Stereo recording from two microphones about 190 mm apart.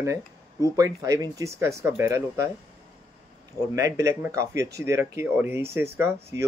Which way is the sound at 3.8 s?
15° right (ahead or behind).